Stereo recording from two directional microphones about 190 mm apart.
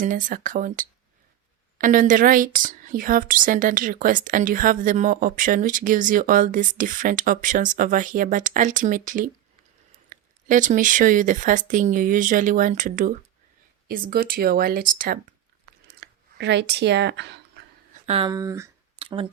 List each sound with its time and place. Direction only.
0.0 s a woman's voice: 45° right (ahead or behind)
16.0 s speech: 65° right (ahead or behind)
18.0 s speech: 30° right (ahead or behind)
18.3 s speech: 20° right (ahead or behind)
18.9 s a sound: 30° right (ahead or behind)